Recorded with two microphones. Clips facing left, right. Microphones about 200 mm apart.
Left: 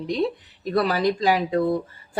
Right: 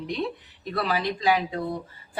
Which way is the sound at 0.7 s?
40° left (ahead or behind).